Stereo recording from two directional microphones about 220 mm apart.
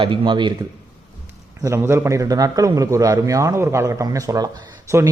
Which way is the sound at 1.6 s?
10° right (ahead or behind).